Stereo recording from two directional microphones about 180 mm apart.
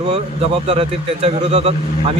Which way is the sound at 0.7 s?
35° right (ahead or behind).